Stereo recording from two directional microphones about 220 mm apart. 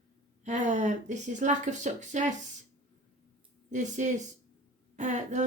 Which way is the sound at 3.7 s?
35° right (ahead or behind).